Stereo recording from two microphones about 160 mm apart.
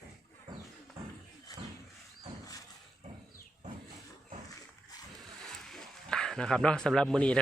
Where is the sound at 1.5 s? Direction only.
25° left (ahead or behind).